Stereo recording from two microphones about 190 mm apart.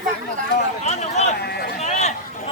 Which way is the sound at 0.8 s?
35° left (ahead or behind).